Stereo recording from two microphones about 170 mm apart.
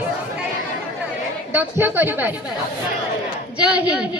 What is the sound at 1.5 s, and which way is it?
Speech, 10° right (ahead or behind).